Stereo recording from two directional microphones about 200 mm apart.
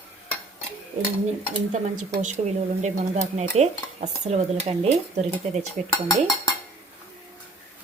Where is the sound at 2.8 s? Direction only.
35° right (ahead or behind).